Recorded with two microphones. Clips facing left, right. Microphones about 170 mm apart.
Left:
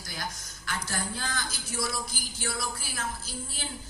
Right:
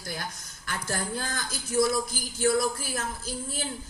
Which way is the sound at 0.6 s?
50° right (ahead or behind).